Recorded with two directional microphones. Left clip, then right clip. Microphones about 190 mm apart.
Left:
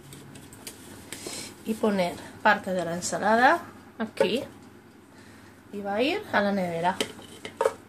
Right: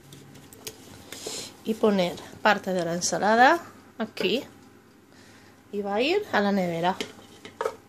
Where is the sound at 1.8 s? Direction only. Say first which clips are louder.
Right 2 dB; 45° right (ahead or behind).